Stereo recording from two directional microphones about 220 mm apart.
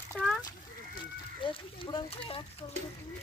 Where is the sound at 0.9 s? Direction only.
25° left (ahead or behind).